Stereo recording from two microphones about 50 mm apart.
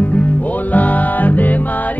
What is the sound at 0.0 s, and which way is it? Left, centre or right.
Music, left.